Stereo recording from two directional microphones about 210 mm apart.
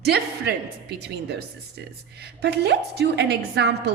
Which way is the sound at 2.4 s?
55° right (ahead or behind).